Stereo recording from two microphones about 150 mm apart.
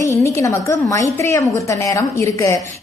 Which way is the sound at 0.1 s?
20° left (ahead or behind).